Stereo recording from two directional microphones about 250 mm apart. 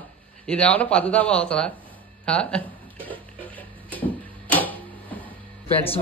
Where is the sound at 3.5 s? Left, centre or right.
Centre.